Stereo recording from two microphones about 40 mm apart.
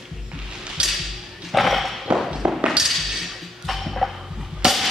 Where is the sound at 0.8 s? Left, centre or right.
Right.